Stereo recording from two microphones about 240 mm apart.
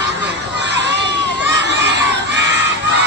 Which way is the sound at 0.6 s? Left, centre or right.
Right.